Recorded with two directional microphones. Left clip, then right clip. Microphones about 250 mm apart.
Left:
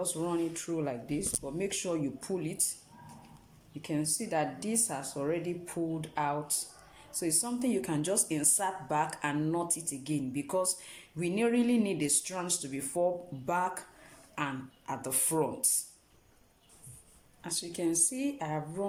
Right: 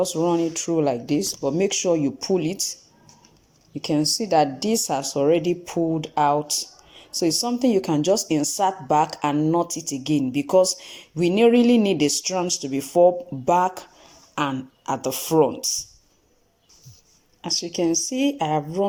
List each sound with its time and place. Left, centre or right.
0.0 s speech: right
3.8 s speech: right
9.6 s speech: centre
10.0 s speech: right
17.7 s speech: right